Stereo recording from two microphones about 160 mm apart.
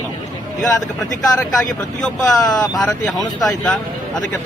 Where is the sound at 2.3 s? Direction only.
25° left (ahead or behind).